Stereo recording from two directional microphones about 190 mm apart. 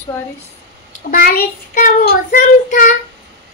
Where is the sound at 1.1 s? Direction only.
50° left (ahead or behind).